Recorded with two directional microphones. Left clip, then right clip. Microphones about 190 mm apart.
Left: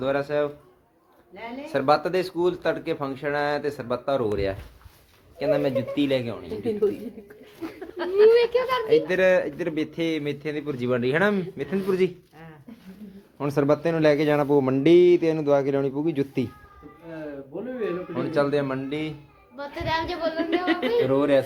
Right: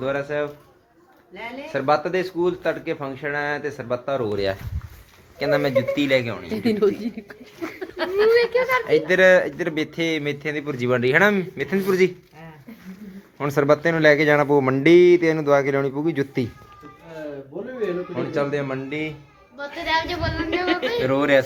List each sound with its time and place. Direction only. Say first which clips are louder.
0.0 s speech: even; 10° left (ahead or behind)
4.3 s speech: right 3 dB; centre (ahead or behind)
7.9 s a sound: left 2 dB; 70° right (ahead or behind)
8.3 s music: right 2 dB; 35° left (ahead or behind)
8.9 s speech: right 4 dB; centre (ahead or behind)
13.4 s speech: right 4 dB; 5° left (ahead or behind)
18.1 s speech: even; 5° left (ahead or behind)
19.5 s speech: right 4 dB; 50° left (ahead or behind)
20.3 s music: right 3 dB; 40° left (ahead or behind)
21.1 s speech: right 5 dB; centre (ahead or behind)